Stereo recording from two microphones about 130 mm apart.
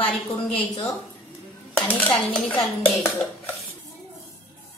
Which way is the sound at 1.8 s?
10° left (ahead or behind).